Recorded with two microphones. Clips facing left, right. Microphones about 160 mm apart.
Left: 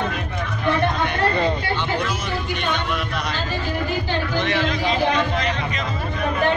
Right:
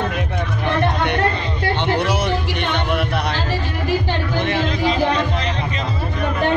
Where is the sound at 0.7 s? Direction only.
65° right (ahead or behind).